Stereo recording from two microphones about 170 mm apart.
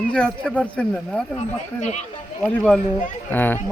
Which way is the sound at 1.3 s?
45° left (ahead or behind).